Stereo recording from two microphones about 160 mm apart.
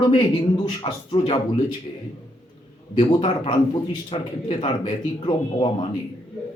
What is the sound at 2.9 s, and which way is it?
A man's voice, 30° left (ahead or behind).